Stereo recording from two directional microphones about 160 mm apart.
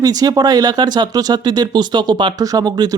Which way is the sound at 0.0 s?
25° right (ahead or behind).